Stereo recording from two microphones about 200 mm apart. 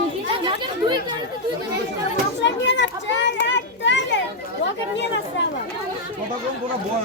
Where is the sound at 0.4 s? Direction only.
25° right (ahead or behind).